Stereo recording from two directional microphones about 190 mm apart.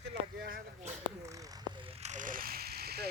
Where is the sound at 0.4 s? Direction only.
50° right (ahead or behind).